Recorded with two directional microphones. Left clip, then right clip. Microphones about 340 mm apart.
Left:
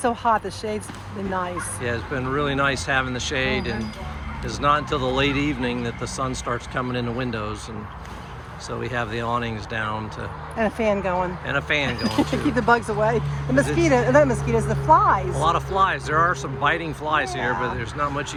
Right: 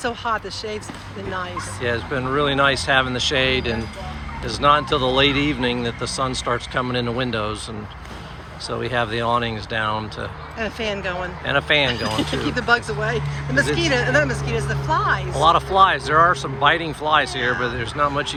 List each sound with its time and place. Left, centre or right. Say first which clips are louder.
0.0 s speech: left 3 dB; left
1.8 s speech: right 5 dB; centre
8.8 s speech: right 5 dB; centre
10.6 s speech: left 3 dB; centre
11.4 s speech: right 9 dB; centre
12.5 s speech: even; centre
15.4 s speech: right 6 dB; centre